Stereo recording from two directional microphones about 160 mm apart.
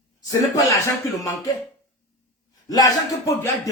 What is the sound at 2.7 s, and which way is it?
Speech, 20° left (ahead or behind).